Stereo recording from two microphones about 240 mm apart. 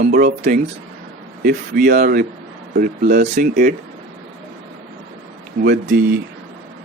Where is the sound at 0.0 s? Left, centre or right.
Right.